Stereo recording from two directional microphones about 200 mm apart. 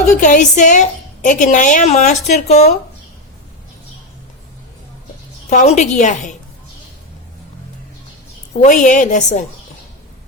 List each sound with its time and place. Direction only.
0.2 s a woman's voice: 40° left (ahead or behind)
5.5 s a woman's voice: 35° left (ahead or behind)
8.6 s a woman's voice: 40° left (ahead or behind)